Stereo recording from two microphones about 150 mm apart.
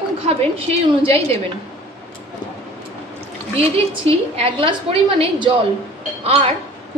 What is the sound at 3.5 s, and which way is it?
A woman's voice, 40° right (ahead or behind).